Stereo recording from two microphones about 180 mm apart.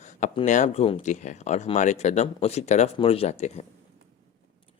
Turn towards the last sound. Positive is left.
turn(degrees=35)  # may be behind; listen again after turning